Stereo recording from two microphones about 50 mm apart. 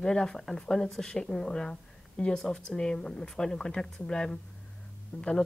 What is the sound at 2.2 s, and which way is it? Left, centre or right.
Speech, left.